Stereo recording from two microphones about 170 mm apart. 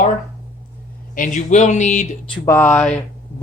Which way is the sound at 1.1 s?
50° left (ahead or behind).